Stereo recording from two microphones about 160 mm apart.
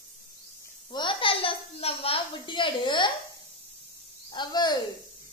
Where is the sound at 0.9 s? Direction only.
30° left (ahead or behind).